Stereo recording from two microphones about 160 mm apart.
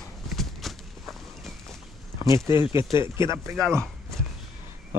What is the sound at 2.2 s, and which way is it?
Speech, 15° right (ahead or behind).